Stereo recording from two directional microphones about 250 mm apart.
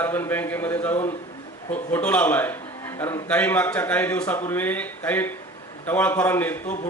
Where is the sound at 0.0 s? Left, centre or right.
Centre.